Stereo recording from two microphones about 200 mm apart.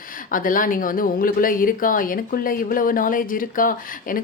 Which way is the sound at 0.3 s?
45° left (ahead or behind).